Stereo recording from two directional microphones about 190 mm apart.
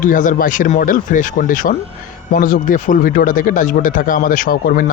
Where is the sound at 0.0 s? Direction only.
45° left (ahead or behind).